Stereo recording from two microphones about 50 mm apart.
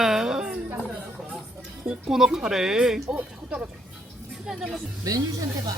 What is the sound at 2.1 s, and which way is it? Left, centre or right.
Speech, centre.